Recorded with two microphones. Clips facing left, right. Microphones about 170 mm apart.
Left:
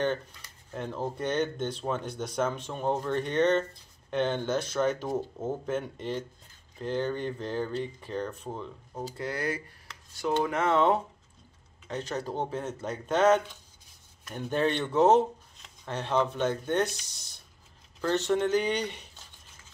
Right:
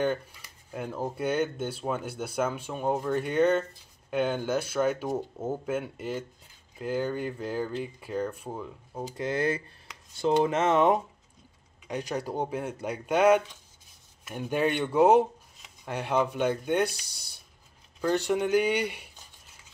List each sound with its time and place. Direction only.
0.0 s speech: 10° right (ahead or behind)
9.0 s speech: 20° right (ahead or behind)